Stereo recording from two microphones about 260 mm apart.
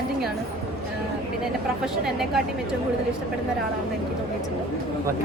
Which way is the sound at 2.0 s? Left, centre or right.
Centre.